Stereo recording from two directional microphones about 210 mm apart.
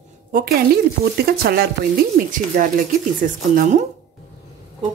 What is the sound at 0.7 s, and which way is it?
Speech, 45° right (ahead or behind).